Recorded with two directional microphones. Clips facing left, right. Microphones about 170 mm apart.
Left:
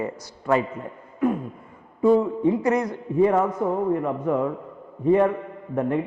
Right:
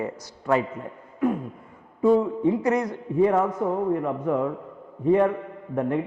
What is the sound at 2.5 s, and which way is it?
A man's voice, 15° left (ahead or behind).